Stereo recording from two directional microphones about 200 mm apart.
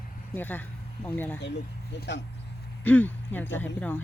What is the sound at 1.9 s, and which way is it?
Speech, 60° left (ahead or behind).